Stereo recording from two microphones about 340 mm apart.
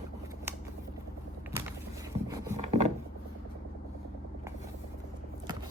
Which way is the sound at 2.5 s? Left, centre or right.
Centre.